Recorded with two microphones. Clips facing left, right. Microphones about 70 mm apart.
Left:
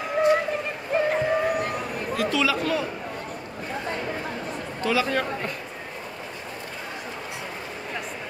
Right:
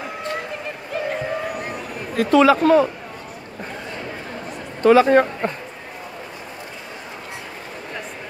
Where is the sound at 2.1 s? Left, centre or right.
Right.